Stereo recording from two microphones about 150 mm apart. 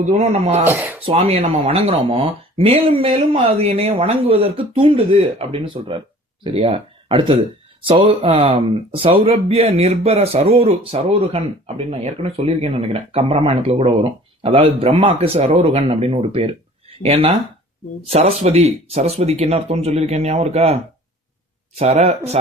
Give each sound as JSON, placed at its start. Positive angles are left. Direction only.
{"t": 0.0, "sound": "speech", "side_deg": -45}
{"t": 0.6, "sound": "speech", "side_deg": -10}
{"t": 1.0, "sound": "speech", "side_deg": -40}
{"t": 21.8, "sound": "speech", "side_deg": -45}